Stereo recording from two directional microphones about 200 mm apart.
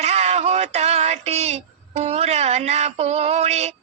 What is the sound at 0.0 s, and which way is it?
Synthetic singing, 35° right (ahead or behind).